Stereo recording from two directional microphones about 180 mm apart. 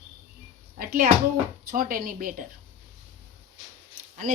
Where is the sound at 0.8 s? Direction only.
50° right (ahead or behind).